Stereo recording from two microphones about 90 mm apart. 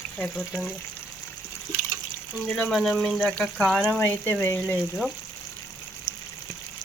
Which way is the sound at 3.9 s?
20° left (ahead or behind).